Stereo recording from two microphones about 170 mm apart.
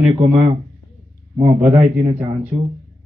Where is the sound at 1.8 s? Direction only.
45° right (ahead or behind).